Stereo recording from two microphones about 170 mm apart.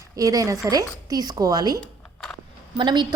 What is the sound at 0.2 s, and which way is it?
A woman's voice, 20° right (ahead or behind).